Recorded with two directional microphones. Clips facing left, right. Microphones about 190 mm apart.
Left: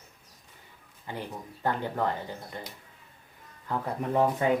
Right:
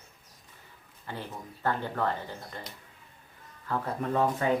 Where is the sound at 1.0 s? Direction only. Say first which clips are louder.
Left 2 dB; 15° left (ahead or behind).